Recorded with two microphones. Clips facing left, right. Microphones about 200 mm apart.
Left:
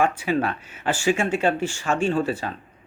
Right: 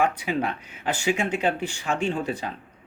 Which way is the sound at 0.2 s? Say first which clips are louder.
Left 3 dB; 15° right (ahead or behind).